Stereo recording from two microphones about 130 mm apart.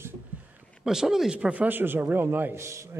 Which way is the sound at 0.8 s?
5° right (ahead or behind).